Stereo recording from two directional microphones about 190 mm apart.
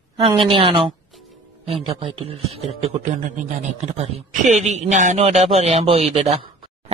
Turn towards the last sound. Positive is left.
turn(degrees=-30)  # may be behind; listen again after turning